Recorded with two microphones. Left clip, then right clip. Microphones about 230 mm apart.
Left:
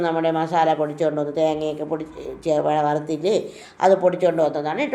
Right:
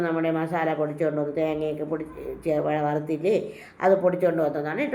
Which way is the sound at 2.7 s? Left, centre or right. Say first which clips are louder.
Left 5 dB; left.